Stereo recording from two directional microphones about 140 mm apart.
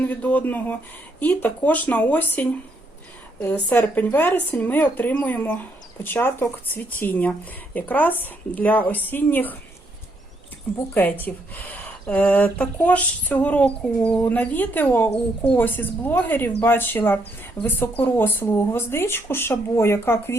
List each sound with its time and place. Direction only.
0.0 s speech: 10° left (ahead or behind)
10.9 s speech: 15° left (ahead or behind)